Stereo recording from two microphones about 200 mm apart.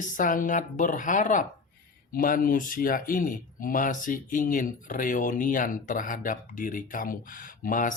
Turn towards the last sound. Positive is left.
turn(degrees=40)  # may be behind; listen again after turning